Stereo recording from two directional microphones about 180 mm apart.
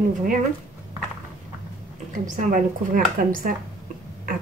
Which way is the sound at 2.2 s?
45° right (ahead or behind).